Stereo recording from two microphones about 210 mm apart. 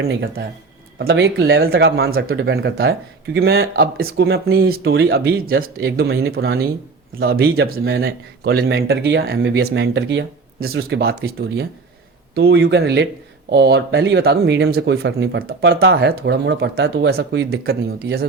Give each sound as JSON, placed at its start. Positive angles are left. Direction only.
{"t": 0.1, "sound": "speech", "side_deg": -50}